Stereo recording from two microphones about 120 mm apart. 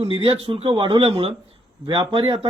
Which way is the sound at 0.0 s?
50° right (ahead or behind).